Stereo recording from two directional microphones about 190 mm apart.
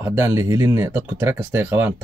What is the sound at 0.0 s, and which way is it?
Speech, 15° right (ahead or behind).